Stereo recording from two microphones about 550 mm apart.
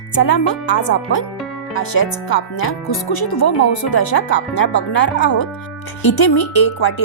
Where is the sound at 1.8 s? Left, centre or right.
Left.